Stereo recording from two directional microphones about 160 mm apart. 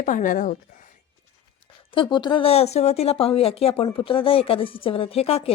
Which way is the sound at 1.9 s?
30° left (ahead or behind).